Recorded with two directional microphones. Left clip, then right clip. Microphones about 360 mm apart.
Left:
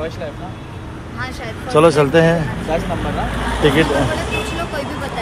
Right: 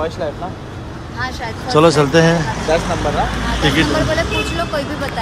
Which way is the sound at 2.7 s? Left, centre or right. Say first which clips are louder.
Right 4 dB; right.